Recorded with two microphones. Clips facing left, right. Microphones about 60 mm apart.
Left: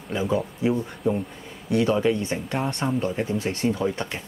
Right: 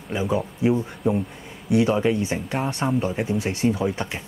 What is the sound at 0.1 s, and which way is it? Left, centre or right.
Speech, centre.